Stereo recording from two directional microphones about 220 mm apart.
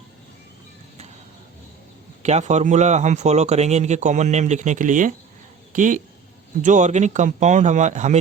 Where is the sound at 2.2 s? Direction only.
30° right (ahead or behind).